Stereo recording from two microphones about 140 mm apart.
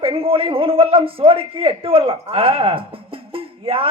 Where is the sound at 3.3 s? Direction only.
40° right (ahead or behind).